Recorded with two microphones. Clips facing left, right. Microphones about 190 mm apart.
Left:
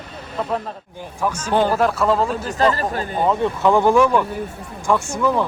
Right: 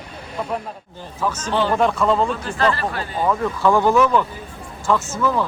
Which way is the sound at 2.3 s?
40° left (ahead or behind).